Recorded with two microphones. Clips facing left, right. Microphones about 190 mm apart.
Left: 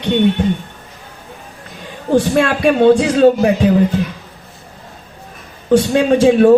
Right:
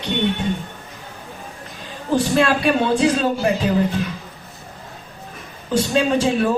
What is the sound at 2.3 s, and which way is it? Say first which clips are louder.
Speech: left 4 dB; 60° left (ahead or behind).